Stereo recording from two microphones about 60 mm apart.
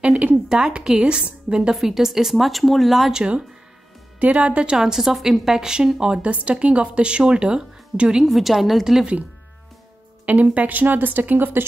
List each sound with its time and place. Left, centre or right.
0.5 s a woman's voice: centre
4.7 s a woman's voice: centre
8.3 s speech: centre
10.2 s speech: right